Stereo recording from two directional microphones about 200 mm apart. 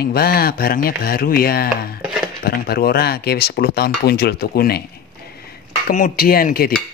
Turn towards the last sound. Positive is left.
turn(degrees=50)  # may be behind; listen again after turning